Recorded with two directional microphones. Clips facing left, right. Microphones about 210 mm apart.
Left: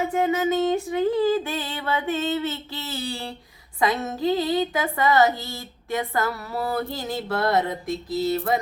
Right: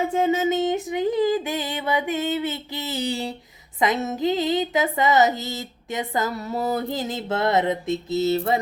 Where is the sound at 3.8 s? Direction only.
20° right (ahead or behind).